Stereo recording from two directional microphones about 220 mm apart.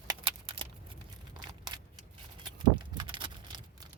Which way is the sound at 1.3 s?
20° right (ahead or behind).